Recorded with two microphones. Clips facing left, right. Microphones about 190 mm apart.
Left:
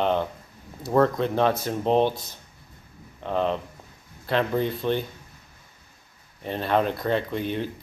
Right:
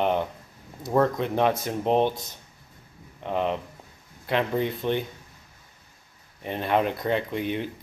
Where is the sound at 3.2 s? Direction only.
15° right (ahead or behind).